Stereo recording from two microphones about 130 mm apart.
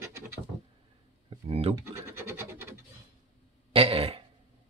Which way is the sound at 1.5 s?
50° right (ahead or behind).